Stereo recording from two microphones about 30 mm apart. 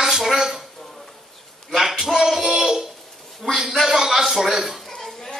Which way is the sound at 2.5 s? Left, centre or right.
Centre.